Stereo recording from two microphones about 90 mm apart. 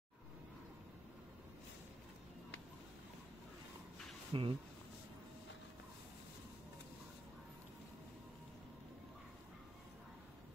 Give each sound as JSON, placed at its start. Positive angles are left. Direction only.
{"t": 4.3, "sound": "speech", "side_deg": -90}